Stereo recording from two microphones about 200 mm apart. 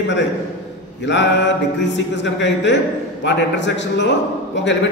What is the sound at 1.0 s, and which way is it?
A man's voice, 60° left (ahead or behind).